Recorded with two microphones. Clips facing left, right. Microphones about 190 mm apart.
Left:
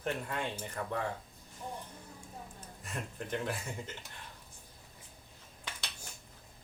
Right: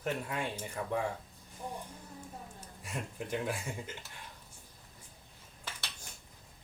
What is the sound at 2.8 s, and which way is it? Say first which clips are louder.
Speech: right 1 dB; 10° right (ahead or behind).